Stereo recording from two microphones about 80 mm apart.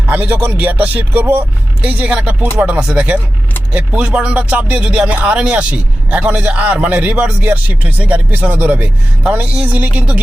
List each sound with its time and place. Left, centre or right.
0.1 s speech: centre